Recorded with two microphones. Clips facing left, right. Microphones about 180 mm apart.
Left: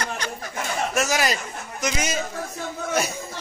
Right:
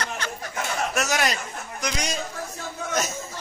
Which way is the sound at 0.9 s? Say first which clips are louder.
Left 3 dB; centre (ahead or behind).